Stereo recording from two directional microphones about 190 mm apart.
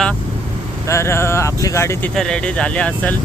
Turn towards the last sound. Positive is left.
turn(degrees=5)  # may be behind; listen again after turning